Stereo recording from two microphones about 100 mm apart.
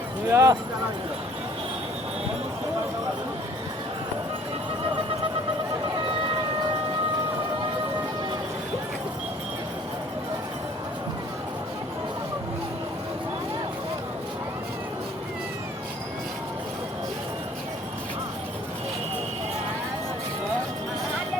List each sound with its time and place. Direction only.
0.3 s speech: 30° right (ahead or behind)